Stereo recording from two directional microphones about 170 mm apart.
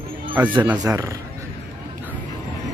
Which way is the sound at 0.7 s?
20° right (ahead or behind).